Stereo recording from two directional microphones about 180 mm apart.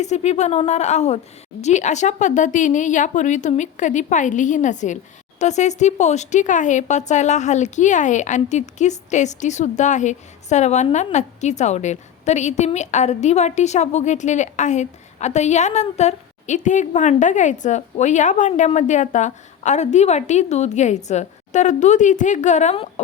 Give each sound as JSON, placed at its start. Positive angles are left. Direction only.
{"t": 0.0, "sound": "speech", "side_deg": 40}